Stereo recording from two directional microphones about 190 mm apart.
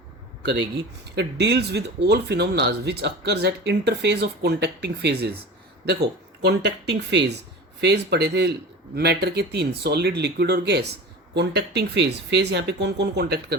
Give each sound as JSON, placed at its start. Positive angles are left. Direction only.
{"t": 1.1, "sound": "speech", "side_deg": -60}
{"t": 6.4, "sound": "speech", "side_deg": -60}